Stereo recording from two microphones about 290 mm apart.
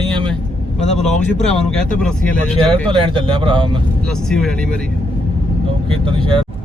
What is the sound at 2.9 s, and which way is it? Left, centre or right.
Speech, centre.